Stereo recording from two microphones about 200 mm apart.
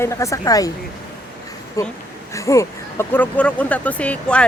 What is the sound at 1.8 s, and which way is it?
Speech, 15° left (ahead or behind).